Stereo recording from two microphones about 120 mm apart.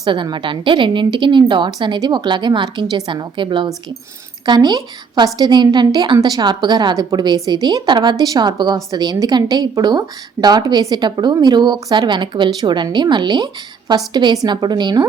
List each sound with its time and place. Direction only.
0.0 s a woman's voice: 40° right (ahead or behind)